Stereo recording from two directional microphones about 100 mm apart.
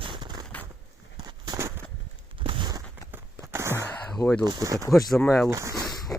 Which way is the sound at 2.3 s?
60° right (ahead or behind).